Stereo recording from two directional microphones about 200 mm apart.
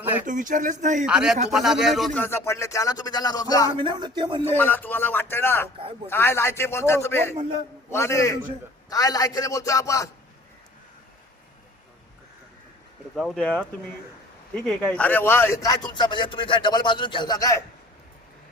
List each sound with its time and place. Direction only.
0.0 s a sound: 10° right (ahead or behind)
0.3 s speech: 40° right (ahead or behind)
1.0 s speech: 5° right (ahead or behind); by 3.7 s 20° left (ahead or behind)
3.8 s speech: 20° right (ahead or behind)
4.4 s speech: 10° left (ahead or behind)
13.1 s a man's voice: centre (ahead or behind); by 17.6 s 20° left (ahead or behind)